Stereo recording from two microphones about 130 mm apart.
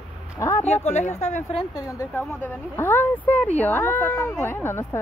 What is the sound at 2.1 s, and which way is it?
Speech, 15° left (ahead or behind).